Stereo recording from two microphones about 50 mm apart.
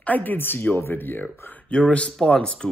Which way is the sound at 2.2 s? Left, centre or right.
Centre.